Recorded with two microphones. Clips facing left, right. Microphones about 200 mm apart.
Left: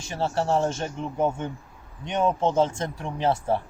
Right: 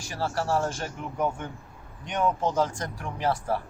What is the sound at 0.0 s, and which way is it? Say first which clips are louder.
Speech: left 3 dB; 25° left (ahead or behind).